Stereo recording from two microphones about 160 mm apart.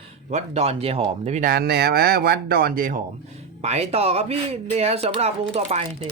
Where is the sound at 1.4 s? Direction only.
70° right (ahead or behind).